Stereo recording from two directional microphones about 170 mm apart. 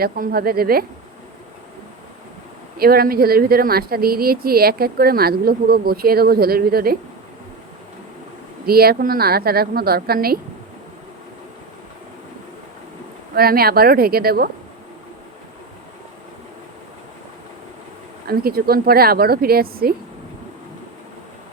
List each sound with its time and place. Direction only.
0.0 s speech: 60° right (ahead or behind)
2.7 s speech: 65° right (ahead or behind)
8.6 s speech: 65° right (ahead or behind)
13.3 s speech: 65° right (ahead or behind)
18.3 s speech: 65° right (ahead or behind)